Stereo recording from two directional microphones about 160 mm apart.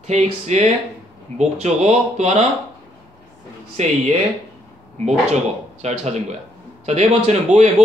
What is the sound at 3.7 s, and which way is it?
Speech, 45° right (ahead or behind).